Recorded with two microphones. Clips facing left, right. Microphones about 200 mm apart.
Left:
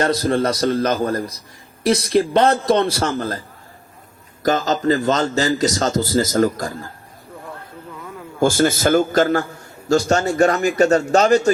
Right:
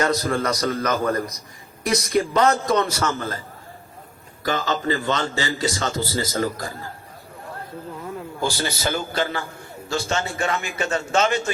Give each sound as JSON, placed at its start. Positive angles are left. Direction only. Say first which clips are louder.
{"t": 0.1, "sound": "a man's voice", "louder": "left 4 dB", "side_deg": 30}
{"t": 4.4, "sound": "a man's voice", "louder": "left 6 dB", "side_deg": 40}
{"t": 8.4, "sound": "a man's voice", "louder": "left 11 dB", "side_deg": 50}